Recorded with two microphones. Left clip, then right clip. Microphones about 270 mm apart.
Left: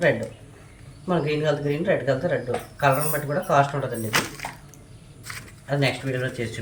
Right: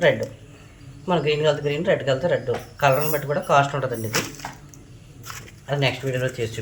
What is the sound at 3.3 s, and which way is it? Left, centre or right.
Speech, centre.